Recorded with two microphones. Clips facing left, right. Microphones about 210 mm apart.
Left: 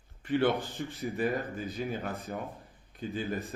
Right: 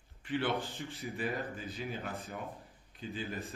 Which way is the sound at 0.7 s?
15° left (ahead or behind).